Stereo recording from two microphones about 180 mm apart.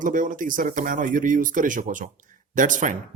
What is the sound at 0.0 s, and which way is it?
A man's voice, 45° right (ahead or behind).